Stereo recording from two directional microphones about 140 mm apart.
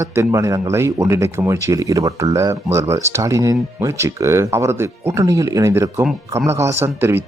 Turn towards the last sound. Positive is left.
turn(degrees=-15)  # may be behind; listen again after turning